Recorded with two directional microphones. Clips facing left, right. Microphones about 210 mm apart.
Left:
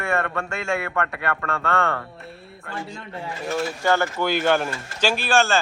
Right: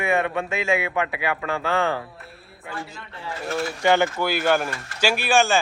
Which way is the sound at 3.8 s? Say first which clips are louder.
Right 3 dB; 20° right (ahead or behind).